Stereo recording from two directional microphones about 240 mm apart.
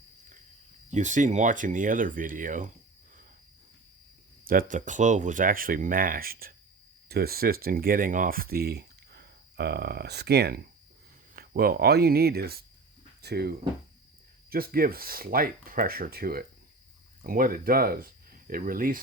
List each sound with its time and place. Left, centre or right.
0.9 s speech: right
4.4 s speech: right